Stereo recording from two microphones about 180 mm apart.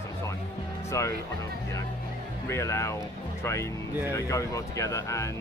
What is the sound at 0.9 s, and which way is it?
Speech, 15° left (ahead or behind).